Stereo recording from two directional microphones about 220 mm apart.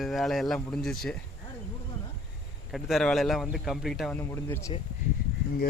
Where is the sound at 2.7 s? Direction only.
Centre (ahead or behind).